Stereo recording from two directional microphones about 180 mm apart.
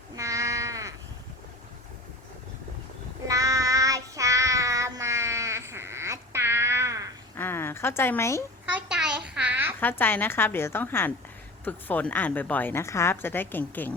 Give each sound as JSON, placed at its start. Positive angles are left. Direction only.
{"t": 0.2, "sound": "sheep", "side_deg": -15}
{"t": 3.2, "sound": "child singing", "side_deg": -20}
{"t": 7.3, "sound": "a sound", "side_deg": 10}
{"t": 8.6, "sound": "babbling", "side_deg": -5}
{"t": 9.8, "sound": "a woman's voice", "side_deg": 10}